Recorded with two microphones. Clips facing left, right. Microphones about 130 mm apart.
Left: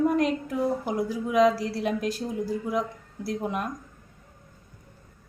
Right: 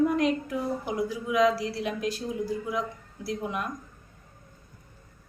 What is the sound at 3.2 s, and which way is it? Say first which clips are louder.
Speech: left 2 dB; 40° left (ahead or behind).